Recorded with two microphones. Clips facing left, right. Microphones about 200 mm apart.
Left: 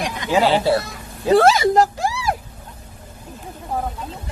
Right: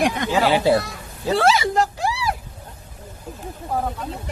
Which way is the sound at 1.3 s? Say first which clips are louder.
Left 5 dB; 45° left (ahead or behind).